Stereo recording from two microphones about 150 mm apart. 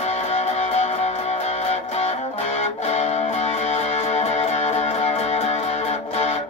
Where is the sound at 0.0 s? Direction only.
45° left (ahead or behind).